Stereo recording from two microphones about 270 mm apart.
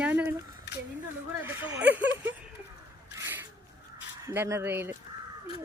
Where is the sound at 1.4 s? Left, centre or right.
Centre.